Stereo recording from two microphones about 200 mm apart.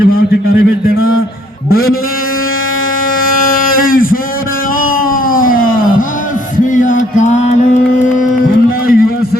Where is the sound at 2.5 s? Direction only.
85° left.